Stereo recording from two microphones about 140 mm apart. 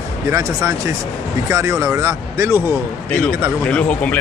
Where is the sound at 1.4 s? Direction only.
20° right (ahead or behind).